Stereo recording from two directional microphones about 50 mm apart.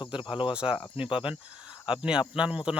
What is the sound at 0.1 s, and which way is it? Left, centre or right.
Speech, centre.